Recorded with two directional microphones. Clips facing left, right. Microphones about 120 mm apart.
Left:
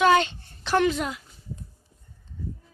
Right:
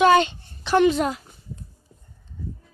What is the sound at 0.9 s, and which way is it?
Speech, 50° right (ahead or behind).